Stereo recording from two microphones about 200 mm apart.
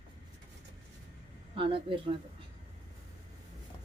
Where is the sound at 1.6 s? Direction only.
25° right (ahead or behind).